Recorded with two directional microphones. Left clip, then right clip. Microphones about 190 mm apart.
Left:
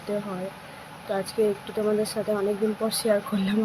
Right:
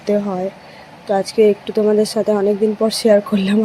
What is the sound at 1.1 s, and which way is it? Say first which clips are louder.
Speech: right 11 dB; 35° right (ahead or behind).